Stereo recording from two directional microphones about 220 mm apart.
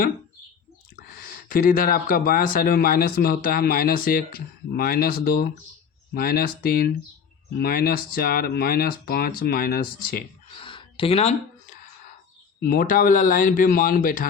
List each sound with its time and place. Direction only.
1.0 s speech: 45° left (ahead or behind)
10.6 s gasp: 20° left (ahead or behind)
12.5 s speech: 40° left (ahead or behind)